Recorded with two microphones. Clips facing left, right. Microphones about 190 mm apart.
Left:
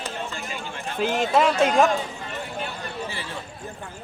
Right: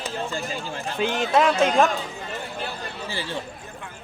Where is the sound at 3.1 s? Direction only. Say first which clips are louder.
Right 4 dB; 30° right (ahead or behind).